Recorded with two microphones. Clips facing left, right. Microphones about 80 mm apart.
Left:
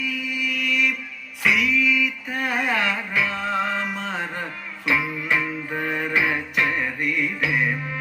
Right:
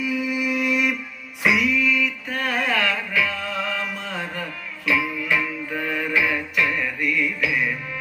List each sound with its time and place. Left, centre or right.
0.0 s music: centre
1.5 s music: centre; by 7.8 s left